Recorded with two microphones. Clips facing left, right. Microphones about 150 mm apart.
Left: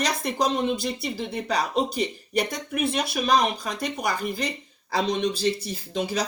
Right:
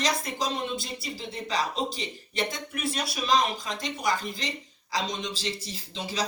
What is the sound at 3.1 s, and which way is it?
Speech, 60° left (ahead or behind).